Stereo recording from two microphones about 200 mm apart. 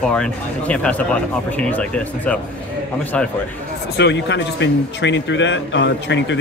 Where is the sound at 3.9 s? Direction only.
60° left (ahead or behind).